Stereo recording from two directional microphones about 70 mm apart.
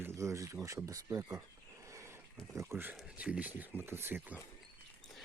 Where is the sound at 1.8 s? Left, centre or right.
Right.